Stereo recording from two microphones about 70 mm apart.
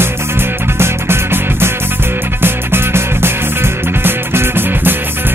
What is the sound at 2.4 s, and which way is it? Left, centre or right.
Music, right.